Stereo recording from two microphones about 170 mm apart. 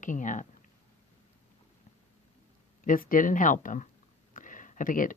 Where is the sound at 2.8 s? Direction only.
50° left (ahead or behind).